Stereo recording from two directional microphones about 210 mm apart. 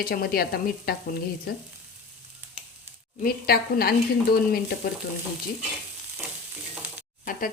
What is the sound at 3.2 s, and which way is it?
Speech, 45° left (ahead or behind).